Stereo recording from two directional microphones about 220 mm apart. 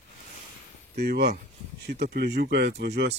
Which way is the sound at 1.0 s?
45° right (ahead or behind).